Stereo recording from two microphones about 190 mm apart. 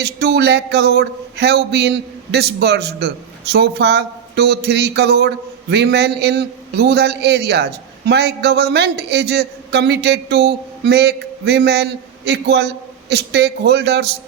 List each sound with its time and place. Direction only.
0.0 s a man's voice: 60° right (ahead or behind)